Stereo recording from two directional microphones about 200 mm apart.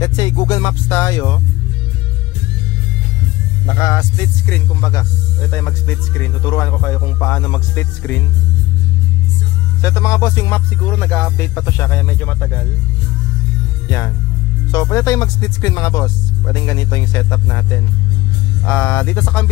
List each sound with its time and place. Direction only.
0.0 s speech: 20° left (ahead or behind)
3.6 s speech: 20° left (ahead or behind)
9.8 s speech: 15° left (ahead or behind)
13.8 s speech: 15° left (ahead or behind)